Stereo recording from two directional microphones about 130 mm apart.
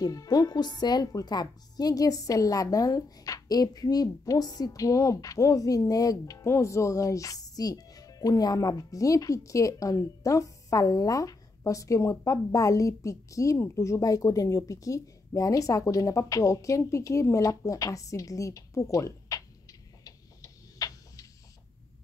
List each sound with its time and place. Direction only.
0.0 s a woman's voice: 30° left (ahead or behind)
20.0 s tick-tock: 25° left (ahead or behind)